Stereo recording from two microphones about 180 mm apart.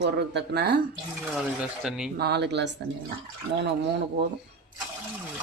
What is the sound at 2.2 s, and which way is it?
Speech, 70° right (ahead or behind).